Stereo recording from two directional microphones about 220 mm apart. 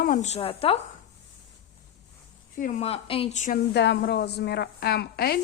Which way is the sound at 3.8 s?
50° left (ahead or behind).